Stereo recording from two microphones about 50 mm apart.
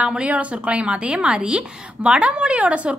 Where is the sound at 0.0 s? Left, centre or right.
Right.